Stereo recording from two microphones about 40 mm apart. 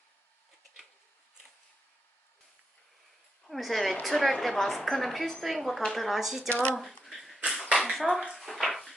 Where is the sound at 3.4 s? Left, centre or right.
Centre.